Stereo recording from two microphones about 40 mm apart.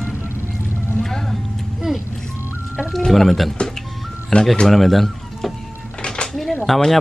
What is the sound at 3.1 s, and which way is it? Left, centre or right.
Speech, centre.